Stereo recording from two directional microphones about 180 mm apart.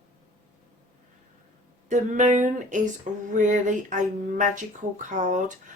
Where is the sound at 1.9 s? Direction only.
45° right (ahead or behind).